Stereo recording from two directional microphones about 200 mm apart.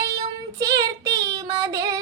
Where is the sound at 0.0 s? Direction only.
15° right (ahead or behind).